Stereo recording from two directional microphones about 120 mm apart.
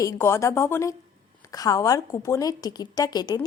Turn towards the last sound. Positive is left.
turn(degrees=35)  # may be behind; listen again after turning